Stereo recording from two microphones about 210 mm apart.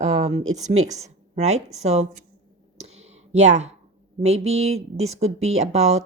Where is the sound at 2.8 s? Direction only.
30° right (ahead or behind).